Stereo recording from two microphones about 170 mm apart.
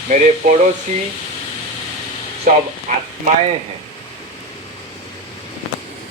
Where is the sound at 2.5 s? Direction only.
55° right (ahead or behind).